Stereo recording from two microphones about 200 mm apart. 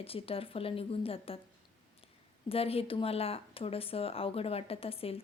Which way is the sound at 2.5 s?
30° left (ahead or behind).